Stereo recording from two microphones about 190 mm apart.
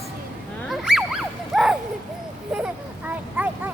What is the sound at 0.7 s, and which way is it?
Dog, centre (ahead or behind).